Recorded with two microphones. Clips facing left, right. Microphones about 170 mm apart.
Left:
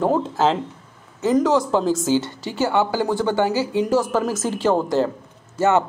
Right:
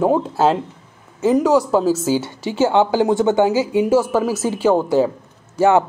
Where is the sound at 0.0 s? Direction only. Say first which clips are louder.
Right 3 dB; 10° right (ahead or behind).